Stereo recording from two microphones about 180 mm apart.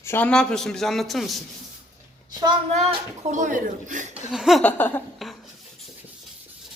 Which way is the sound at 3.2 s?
45° right (ahead or behind).